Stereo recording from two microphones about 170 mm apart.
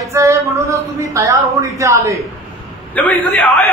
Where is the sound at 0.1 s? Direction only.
15° right (ahead or behind).